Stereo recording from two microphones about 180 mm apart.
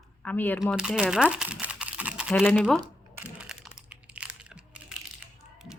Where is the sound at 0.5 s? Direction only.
5° right (ahead or behind).